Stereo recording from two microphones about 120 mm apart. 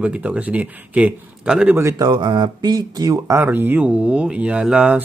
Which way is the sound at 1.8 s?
30° right (ahead or behind).